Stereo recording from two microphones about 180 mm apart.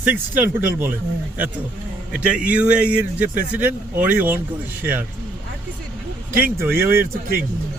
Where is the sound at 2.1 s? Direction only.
5° right (ahead or behind).